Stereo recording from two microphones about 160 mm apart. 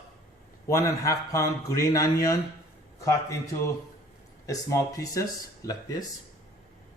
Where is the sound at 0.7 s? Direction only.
20° left (ahead or behind).